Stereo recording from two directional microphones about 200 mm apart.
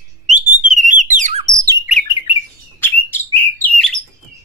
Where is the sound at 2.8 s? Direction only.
10° left (ahead or behind).